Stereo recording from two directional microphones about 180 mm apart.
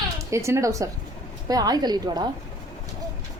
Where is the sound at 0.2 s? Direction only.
15° right (ahead or behind).